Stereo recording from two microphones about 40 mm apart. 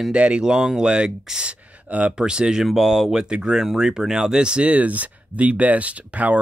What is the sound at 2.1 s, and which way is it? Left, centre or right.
Speech, right.